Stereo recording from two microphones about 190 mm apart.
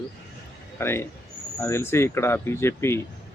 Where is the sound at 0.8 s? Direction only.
15° left (ahead or behind).